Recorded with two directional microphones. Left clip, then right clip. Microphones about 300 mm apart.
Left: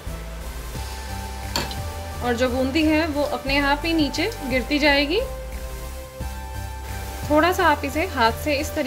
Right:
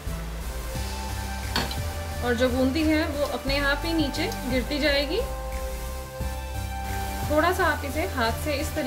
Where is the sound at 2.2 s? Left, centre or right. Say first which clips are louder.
Left 2 dB; centre.